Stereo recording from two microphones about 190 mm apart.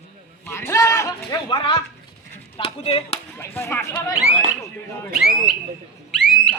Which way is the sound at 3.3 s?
10° left (ahead or behind).